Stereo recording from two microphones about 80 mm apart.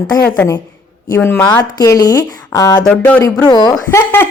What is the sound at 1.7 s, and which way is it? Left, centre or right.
Speech, left.